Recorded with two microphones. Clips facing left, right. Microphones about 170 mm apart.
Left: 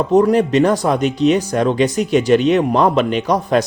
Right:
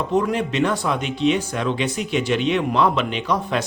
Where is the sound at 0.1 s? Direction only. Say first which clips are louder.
Left 10 dB; 40° left (ahead or behind).